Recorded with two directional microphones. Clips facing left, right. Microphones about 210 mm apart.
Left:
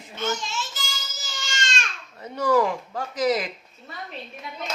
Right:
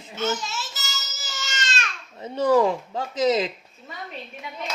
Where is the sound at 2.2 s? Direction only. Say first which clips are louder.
Right 2 dB; 25° right (ahead or behind).